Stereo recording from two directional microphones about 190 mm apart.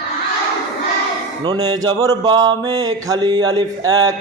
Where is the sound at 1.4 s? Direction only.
20° right (ahead or behind).